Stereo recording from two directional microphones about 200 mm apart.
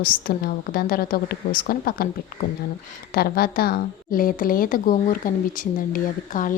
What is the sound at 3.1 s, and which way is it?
Speech, 50° left (ahead or behind).